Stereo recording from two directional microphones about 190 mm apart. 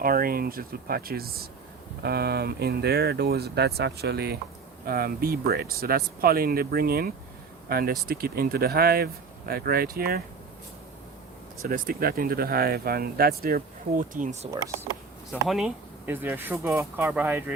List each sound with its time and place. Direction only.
0.0 s speech: 50° right (ahead or behind)
11.7 s speech: 50° right (ahead or behind)
15.3 s speech: centre (ahead or behind)